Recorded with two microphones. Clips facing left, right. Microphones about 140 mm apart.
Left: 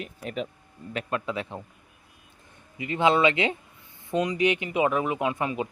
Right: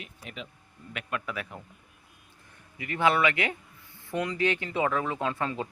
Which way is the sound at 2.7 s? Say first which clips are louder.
Left 3 dB; 20° left (ahead or behind).